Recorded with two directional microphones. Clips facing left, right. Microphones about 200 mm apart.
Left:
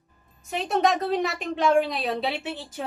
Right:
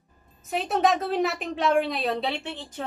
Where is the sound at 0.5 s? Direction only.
Centre (ahead or behind).